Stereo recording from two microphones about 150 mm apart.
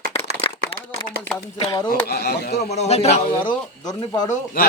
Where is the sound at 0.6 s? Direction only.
90° right.